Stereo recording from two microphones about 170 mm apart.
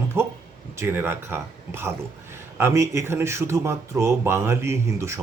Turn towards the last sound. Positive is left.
turn(degrees=-15)  # may be behind; listen again after turning